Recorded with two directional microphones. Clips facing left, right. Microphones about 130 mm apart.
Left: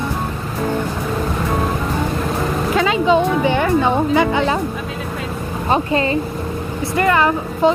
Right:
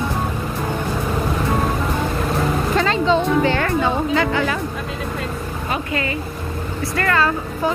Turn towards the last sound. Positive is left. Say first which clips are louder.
# left 5 dB
turn(degrees=20)  # may be behind; listen again after turning